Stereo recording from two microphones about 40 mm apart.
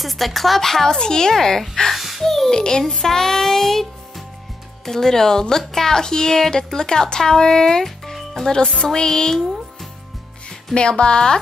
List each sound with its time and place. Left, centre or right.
0.0 s a woman's voice: centre
0.9 s a woman's voice: centre
2.5 s speech: centre
2.8 s child singing: centre
4.8 s a woman's voice: centre
8.0 s music: centre
8.5 s a woman's voice: centre
10.7 s speech: left